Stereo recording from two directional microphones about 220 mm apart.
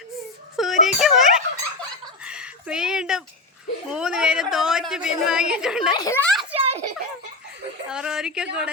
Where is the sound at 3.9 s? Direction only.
5° right (ahead or behind).